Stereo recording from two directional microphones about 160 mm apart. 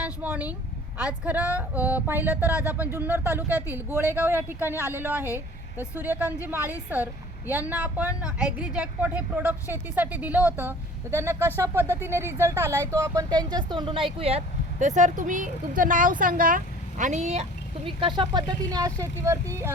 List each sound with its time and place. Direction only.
0.0 s a woman's voice: 10° right (ahead or behind); by 16.6 s 60° right (ahead or behind)
17.0 s speech: 45° right (ahead or behind)
17.8 s speech: 30° right (ahead or behind)